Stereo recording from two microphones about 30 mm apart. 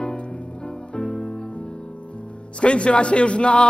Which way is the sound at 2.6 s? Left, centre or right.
Left.